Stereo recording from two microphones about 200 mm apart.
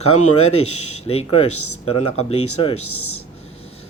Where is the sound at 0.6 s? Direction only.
90° left.